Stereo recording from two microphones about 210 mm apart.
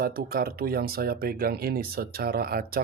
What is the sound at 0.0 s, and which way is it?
Speech, 45° right (ahead or behind).